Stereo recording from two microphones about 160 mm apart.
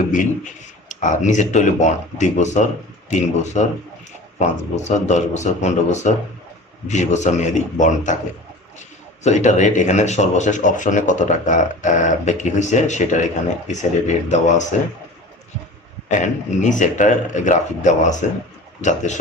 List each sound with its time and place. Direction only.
0.1 s speech: 50° left (ahead or behind)
9.2 s speech: 50° left (ahead or behind)
16.0 s speech: 50° left (ahead or behind)